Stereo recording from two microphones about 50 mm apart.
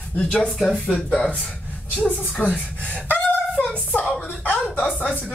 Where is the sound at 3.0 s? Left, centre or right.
Left.